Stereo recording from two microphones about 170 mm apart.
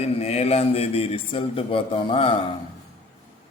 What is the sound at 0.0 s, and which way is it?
Speech, 40° left (ahead or behind).